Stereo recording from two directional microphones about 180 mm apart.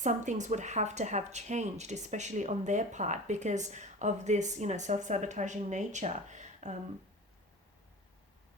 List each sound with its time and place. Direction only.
0.0 s speech: 40° right (ahead or behind)